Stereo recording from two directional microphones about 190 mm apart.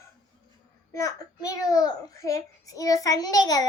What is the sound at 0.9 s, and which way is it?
A child's voice, 20° left (ahead or behind).